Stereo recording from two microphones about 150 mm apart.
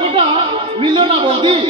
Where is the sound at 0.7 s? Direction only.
35° right (ahead or behind).